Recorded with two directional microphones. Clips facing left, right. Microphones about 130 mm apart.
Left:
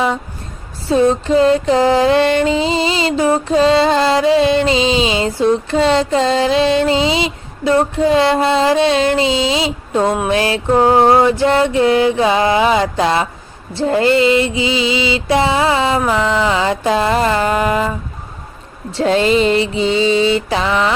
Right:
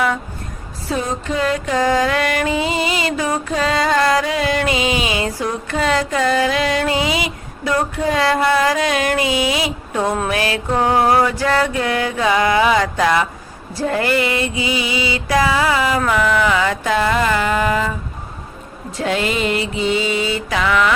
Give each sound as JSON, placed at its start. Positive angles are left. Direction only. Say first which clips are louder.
{"t": 0.9, "sound": "music", "louder": "left 9 dB", "side_deg": 30}